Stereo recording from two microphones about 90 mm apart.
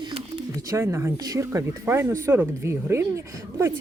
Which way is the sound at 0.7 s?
30° right (ahead or behind).